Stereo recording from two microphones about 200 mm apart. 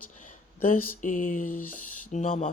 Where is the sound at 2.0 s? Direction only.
35° left (ahead or behind).